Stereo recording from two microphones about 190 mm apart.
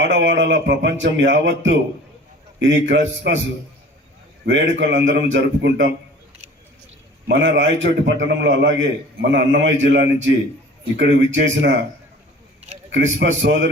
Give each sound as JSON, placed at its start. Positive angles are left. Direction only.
{"t": 0.0, "sound": "a man's voice", "side_deg": -70}
{"t": 4.4, "sound": "a man's voice", "side_deg": -70}
{"t": 7.3, "sound": "a man's voice", "side_deg": -70}
{"t": 12.9, "sound": "a man's voice", "side_deg": -75}